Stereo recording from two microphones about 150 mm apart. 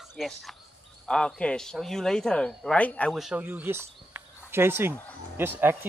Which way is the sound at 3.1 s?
5° right (ahead or behind).